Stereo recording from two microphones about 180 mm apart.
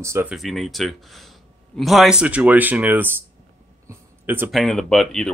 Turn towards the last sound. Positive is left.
turn(degrees=0)  # may be behind; listen again after turning